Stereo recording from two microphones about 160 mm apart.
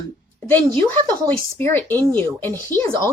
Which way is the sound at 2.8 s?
30° right (ahead or behind).